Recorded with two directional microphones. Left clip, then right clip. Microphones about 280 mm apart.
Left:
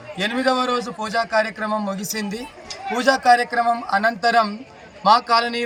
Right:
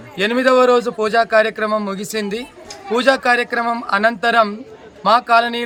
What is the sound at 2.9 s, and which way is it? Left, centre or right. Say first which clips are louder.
A man's voice: right 1 dB; centre.